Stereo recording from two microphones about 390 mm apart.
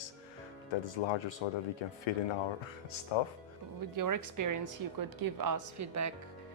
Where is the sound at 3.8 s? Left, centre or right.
Right.